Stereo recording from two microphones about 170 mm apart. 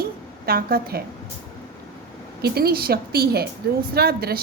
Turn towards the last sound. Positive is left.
turn(degrees=-65)  # may be behind; listen again after turning